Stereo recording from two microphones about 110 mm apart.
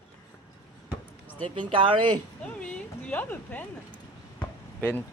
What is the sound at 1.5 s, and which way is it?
Speech, 50° right (ahead or behind).